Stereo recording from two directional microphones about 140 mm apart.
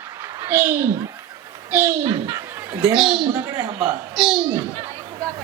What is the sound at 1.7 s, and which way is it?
Speech, 20° right (ahead or behind).